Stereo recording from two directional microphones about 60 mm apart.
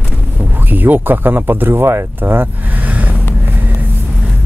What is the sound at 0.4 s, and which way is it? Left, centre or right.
Speech, right.